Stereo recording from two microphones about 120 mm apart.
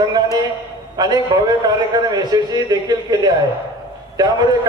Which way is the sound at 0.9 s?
35° right (ahead or behind).